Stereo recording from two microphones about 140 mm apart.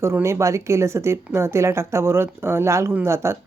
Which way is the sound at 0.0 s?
20° right (ahead or behind).